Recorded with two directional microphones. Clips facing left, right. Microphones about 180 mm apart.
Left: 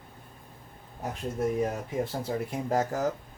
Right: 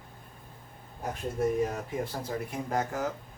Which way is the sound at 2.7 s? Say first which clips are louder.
Left 4 dB; 35° left (ahead or behind).